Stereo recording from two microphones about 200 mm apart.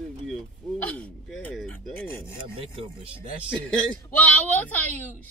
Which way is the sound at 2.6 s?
25° right (ahead or behind).